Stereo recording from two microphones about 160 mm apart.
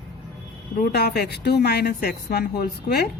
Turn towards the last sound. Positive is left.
turn(degrees=80)